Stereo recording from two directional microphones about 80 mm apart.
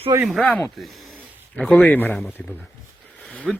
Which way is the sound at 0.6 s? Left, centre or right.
Centre.